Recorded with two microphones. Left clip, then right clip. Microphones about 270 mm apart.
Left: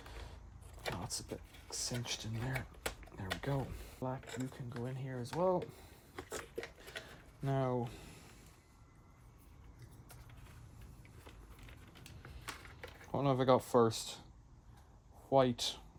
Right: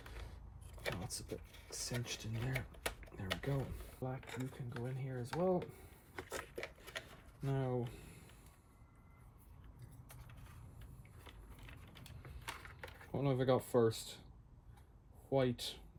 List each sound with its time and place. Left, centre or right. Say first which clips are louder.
0.8 s vehicle: left 1 dB; centre
1.3 s speech: left 2 dB; centre
6.1 s shuffling cards: left 1 dB; centre
7.4 s speech: left 4 dB; left
7.9 s a sound: left 3 dB; left
12.5 s a sound: even; centre
13.1 s speech: left 5 dB; left
15.3 s speech: left 6 dB; left